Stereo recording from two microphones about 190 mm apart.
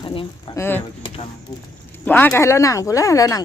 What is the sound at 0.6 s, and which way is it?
Speech, 10° left (ahead or behind).